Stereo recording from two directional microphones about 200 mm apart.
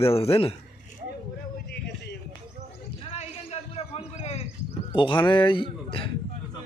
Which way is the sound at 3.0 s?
30° left (ahead or behind).